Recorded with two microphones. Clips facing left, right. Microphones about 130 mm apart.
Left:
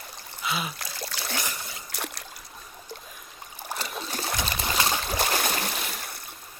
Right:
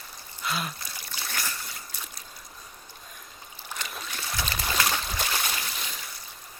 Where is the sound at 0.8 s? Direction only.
90° left.